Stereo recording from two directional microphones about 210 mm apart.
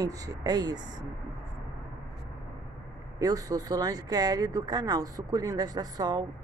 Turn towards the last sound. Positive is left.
turn(degrees=-20)  # may be behind; listen again after turning